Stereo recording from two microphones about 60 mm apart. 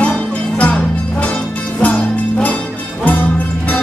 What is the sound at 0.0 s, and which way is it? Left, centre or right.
Music, left.